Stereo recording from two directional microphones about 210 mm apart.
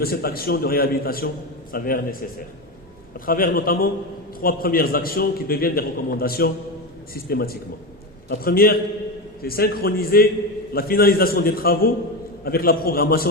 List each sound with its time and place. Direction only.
0.0 s a man's voice: 45° left (ahead or behind)
3.2 s a man's voice: 40° left (ahead or behind)